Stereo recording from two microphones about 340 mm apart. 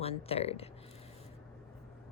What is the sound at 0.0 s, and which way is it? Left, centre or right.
Speech, centre.